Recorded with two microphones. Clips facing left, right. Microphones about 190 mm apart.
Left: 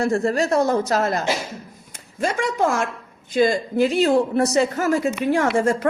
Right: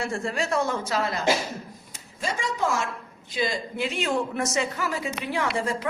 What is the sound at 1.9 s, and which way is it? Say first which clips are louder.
A woman's voice: left 8 dB; 55° left (ahead or behind).